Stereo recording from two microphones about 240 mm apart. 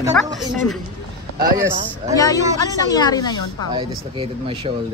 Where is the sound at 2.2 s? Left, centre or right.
Centre.